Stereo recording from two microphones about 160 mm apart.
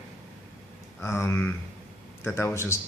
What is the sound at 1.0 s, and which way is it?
Speech, 15° left (ahead or behind).